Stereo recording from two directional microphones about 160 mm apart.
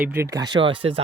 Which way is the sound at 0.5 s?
35° right (ahead or behind).